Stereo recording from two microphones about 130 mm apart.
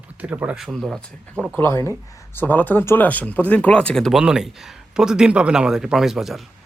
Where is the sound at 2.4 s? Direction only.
15° left (ahead or behind).